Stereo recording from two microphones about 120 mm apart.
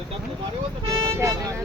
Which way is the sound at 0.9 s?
25° right (ahead or behind).